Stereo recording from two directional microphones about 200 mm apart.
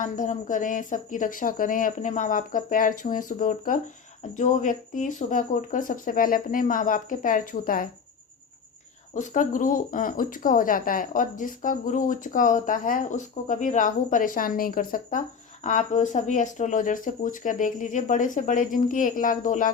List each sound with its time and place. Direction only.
0.0 s speech: 40° left (ahead or behind)
9.1 s speech: 40° left (ahead or behind)